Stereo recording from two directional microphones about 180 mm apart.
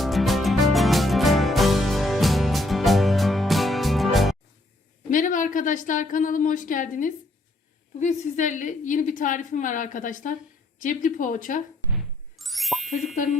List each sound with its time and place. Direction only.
0.0 s music: centre (ahead or behind)
5.1 s a woman's voice: 45° left (ahead or behind)
11.9 s ding: centre (ahead or behind)